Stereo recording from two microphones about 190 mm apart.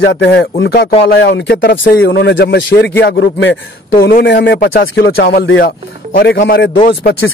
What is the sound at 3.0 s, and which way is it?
Speech, 65° left (ahead or behind).